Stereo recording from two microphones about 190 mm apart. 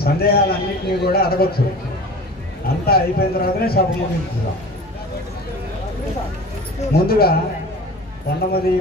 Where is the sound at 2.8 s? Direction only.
55° left (ahead or behind).